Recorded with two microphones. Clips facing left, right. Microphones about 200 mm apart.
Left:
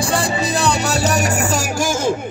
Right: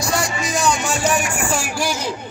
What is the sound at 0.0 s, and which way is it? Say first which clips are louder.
Music: left 3 dB; 30° left (ahead or behind).